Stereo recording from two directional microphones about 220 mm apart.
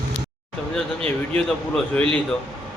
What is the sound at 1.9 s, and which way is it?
Speech, 5° left (ahead or behind).